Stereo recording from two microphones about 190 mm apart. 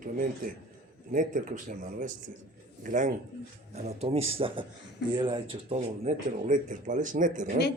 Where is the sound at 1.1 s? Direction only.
45° right (ahead or behind).